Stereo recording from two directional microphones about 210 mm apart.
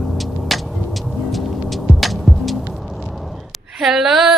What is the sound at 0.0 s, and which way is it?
Vehicle, centre (ahead or behind).